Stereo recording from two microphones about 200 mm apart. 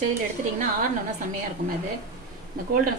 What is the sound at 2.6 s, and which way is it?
Speech, 45° right (ahead or behind).